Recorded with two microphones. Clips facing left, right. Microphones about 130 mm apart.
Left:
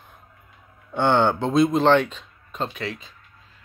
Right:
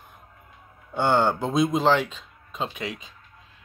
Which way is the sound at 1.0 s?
5° right (ahead or behind).